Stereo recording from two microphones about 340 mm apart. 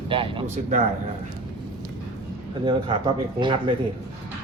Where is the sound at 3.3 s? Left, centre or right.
Centre.